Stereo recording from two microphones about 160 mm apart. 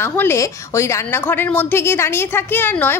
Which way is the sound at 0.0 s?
15° left (ahead or behind).